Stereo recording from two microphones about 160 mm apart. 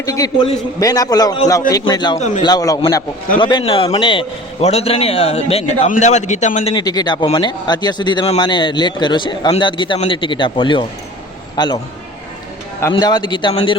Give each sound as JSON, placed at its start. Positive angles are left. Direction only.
{"t": 0.0, "sound": "speech", "side_deg": 20}
{"t": 2.1, "sound": "a man's voice", "side_deg": 50}
{"t": 2.4, "sound": "speech", "side_deg": 25}
{"t": 3.3, "sound": "a man's voice", "side_deg": 35}
{"t": 6.7, "sound": "a man's voice", "side_deg": 25}
{"t": 12.9, "sound": "speech", "side_deg": 25}